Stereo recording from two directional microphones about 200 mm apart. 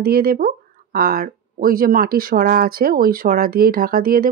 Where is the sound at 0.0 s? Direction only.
50° right (ahead or behind).